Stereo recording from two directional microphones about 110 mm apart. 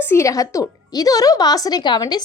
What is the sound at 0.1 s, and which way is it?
A woman's voice, 30° left (ahead or behind).